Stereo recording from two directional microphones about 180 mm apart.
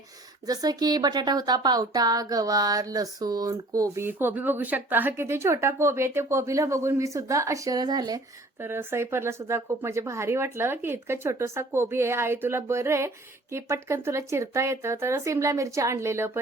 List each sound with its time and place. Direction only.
0.4 s a woman's voice: 20° right (ahead or behind)